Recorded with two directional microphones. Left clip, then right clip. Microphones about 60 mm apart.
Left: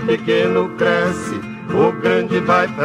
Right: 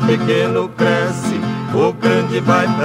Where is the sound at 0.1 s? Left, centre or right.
Right.